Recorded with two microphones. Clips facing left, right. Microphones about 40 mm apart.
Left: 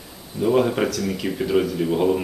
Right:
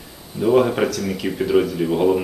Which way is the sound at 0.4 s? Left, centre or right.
Centre.